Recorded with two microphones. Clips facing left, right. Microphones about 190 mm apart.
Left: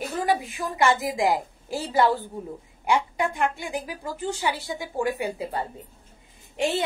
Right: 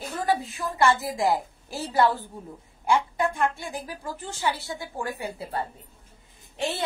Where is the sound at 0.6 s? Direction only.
15° left (ahead or behind).